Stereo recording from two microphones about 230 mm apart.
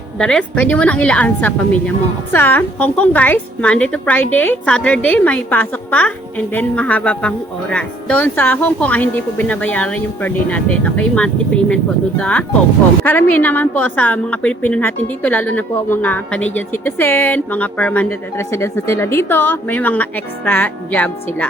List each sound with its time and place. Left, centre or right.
0.2 s a woman's voice: centre